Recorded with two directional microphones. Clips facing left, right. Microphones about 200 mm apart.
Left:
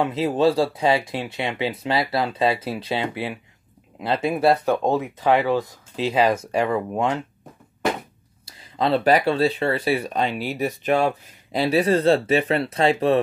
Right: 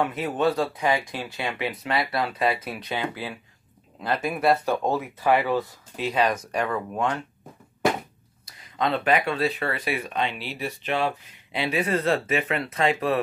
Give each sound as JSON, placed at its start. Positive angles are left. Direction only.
{"t": 0.0, "sound": "speech", "side_deg": 30}
{"t": 5.9, "sound": "speech", "side_deg": 25}
{"t": 8.5, "sound": "speech", "side_deg": 30}